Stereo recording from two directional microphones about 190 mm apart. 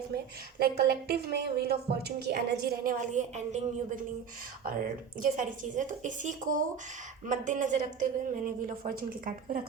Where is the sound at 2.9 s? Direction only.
40° right (ahead or behind).